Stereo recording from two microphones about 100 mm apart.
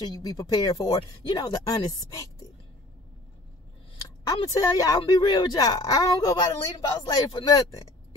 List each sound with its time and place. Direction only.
0.2 s a woman's voice: 40° left (ahead or behind)
4.5 s a woman's voice: 40° left (ahead or behind)